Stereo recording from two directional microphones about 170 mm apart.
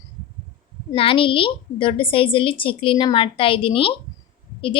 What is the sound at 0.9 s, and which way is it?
A woman's voice, 30° left (ahead or behind).